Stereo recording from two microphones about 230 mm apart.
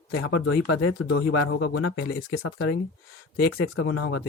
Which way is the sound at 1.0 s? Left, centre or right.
Left.